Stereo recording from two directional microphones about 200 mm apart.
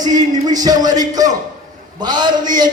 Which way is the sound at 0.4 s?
20° right (ahead or behind).